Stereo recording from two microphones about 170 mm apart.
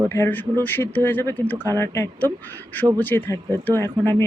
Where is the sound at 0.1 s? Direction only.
15° left (ahead or behind).